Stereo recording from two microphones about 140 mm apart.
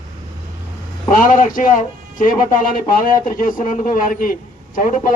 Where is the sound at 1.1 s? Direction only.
75° left (ahead or behind).